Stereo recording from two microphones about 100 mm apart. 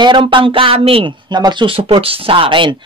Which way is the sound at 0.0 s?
55° right (ahead or behind).